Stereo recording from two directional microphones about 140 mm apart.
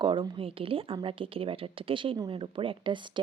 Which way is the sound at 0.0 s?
35° right (ahead or behind).